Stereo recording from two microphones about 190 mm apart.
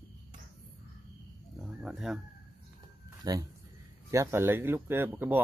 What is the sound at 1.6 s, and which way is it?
Speech, centre (ahead or behind).